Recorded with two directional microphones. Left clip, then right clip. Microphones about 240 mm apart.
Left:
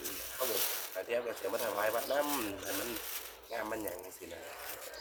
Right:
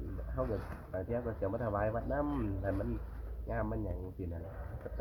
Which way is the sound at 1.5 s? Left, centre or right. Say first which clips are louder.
Left 3 dB; centre.